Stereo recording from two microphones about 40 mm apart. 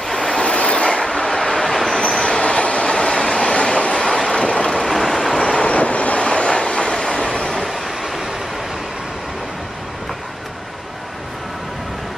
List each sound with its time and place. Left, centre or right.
0.0 s train: centre
0.5 s train: left
1.1 s vehicle: centre
2.2 s train: left
4.6 s train: centre
5.3 s vehicle: centre
5.7 s train: left
7.4 s train: centre